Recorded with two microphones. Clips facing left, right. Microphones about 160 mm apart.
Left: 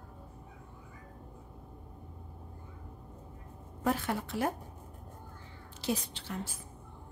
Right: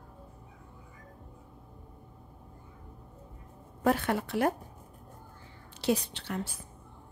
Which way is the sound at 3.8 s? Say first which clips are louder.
Right 4 dB; 65° right (ahead or behind).